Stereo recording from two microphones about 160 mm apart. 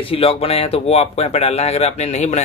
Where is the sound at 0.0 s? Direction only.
35° left (ahead or behind).